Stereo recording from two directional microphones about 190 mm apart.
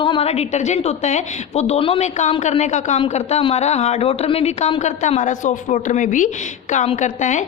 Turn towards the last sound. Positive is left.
turn(degrees=40)  # may be behind; listen again after turning